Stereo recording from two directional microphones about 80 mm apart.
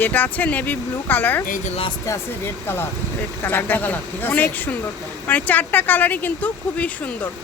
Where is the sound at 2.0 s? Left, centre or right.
Left.